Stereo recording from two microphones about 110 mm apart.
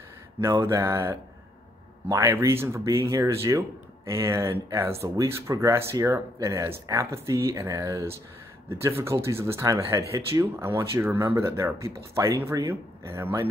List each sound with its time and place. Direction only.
0.4 s speech: 30° right (ahead or behind)